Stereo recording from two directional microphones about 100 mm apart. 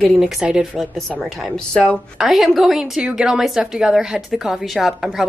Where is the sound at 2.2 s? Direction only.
Centre (ahead or behind).